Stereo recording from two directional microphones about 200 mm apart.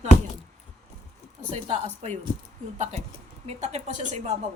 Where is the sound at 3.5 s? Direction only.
35° right (ahead or behind).